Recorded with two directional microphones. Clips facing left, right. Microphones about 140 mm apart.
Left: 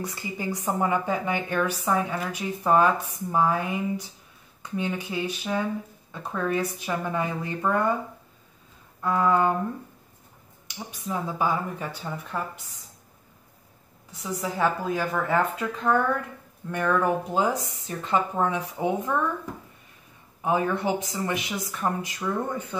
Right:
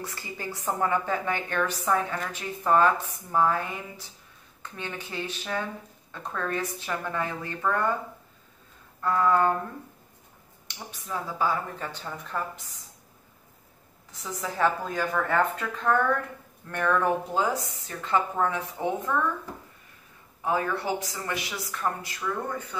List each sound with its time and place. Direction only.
0.0 s a woman's voice: 15° left (ahead or behind)
9.0 s a woman's voice: 15° left (ahead or behind)
10.7 s a woman's voice: 15° left (ahead or behind)
14.4 s a woman's voice: 10° left (ahead or behind)
20.4 s a woman's voice: 20° left (ahead or behind)